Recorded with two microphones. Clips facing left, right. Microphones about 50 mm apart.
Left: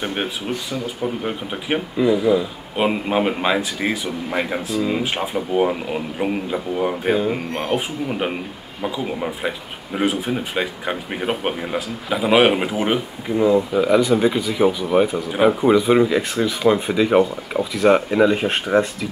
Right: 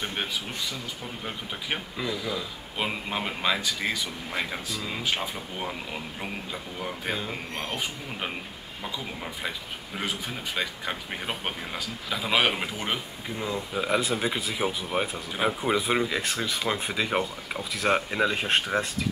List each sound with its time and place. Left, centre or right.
0.0 s speech: left
13.7 s speech: centre